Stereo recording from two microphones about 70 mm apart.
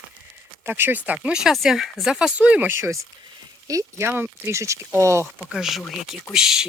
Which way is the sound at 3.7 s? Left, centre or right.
Right.